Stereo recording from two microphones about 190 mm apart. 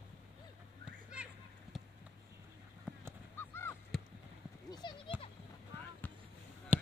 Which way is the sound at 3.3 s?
10° left (ahead or behind).